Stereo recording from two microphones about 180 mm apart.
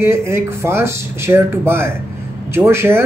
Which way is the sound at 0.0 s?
15° right (ahead or behind).